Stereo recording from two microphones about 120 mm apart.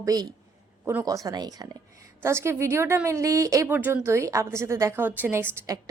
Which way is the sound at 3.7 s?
15° right (ahead or behind).